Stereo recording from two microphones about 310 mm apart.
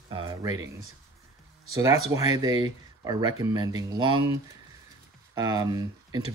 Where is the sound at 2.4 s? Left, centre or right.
Centre.